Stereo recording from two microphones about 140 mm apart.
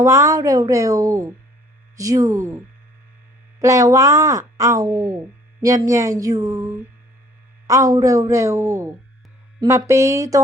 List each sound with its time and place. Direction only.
0.0 s speech: 20° right (ahead or behind)
3.6 s speech: 20° right (ahead or behind)